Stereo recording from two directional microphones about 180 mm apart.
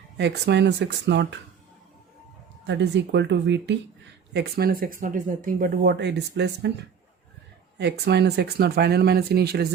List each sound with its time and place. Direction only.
0.2 s speech: 75° right (ahead or behind)
2.6 s speech: 75° right (ahead or behind)
4.4 s speech: 60° right (ahead or behind)
7.8 s speech: 70° right (ahead or behind)